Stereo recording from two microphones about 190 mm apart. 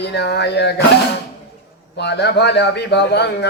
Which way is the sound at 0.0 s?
60° left (ahead or behind).